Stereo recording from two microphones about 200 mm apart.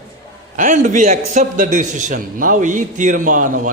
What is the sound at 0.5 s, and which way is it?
A man's voice, 40° right (ahead or behind).